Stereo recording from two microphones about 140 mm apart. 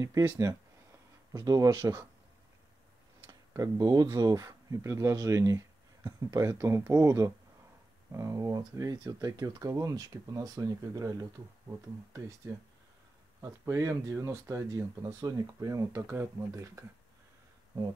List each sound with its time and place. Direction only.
0.0 s speech: 25° right (ahead or behind)
1.3 s speech: 25° right (ahead or behind)
3.3 s speech: 25° right (ahead or behind)
13.4 s speech: 25° right (ahead or behind)